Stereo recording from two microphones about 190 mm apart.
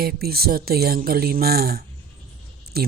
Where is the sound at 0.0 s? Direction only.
55° right (ahead or behind).